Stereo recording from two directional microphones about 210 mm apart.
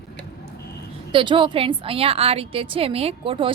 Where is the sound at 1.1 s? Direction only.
25° right (ahead or behind).